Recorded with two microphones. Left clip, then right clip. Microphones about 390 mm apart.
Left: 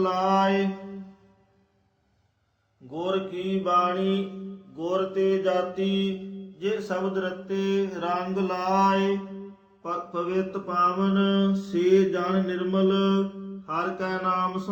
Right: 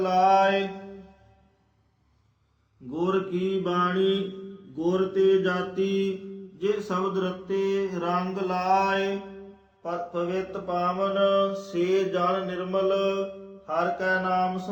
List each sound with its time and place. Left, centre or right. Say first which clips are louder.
0.0 s mantra: right 3 dB; centre
2.9 s mantra: right 2 dB; right
4.8 s mantra: right 2 dB; right
6.6 s mantra: right 1 dB; right; by 9.0 s centre
9.8 s mantra: even; left
13.7 s mantra: right 3 dB; left